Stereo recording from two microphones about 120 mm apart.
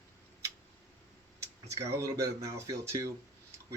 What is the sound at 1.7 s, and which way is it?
Speech, 25° right (ahead or behind).